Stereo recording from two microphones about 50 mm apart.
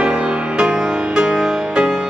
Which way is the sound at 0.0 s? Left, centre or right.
Centre.